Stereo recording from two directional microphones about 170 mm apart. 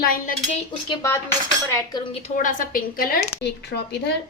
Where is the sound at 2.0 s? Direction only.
35° left (ahead or behind).